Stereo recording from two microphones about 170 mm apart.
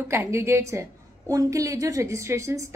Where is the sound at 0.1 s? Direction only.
15° right (ahead or behind).